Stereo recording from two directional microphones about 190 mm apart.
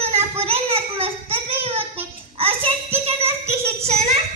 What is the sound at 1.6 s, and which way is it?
Child singing, 30° right (ahead or behind).